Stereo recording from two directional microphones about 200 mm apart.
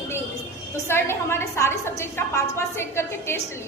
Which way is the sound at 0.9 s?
10° left (ahead or behind).